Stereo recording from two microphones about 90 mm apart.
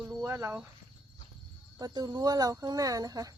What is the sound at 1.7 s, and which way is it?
Speech, 45° right (ahead or behind).